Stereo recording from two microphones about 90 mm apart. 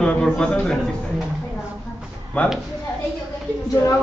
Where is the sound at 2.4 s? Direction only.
20° left (ahead or behind).